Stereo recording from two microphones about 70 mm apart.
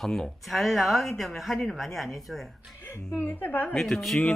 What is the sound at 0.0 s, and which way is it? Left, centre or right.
Speech, centre.